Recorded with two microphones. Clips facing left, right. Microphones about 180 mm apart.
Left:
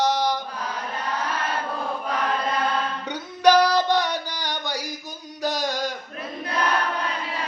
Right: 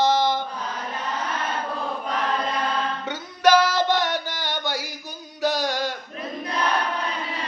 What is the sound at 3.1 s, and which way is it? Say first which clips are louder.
Music: left 1 dB; 15° left (ahead or behind).